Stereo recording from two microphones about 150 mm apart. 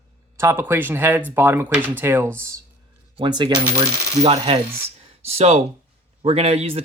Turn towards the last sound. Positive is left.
turn(degrees=-40)  # may be behind; listen again after turning